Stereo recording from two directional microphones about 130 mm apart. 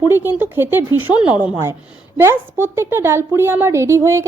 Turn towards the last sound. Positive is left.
turn(degrees=-20)  # may be behind; listen again after turning